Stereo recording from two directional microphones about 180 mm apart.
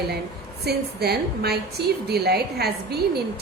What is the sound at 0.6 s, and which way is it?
A woman's voice, 65° right (ahead or behind).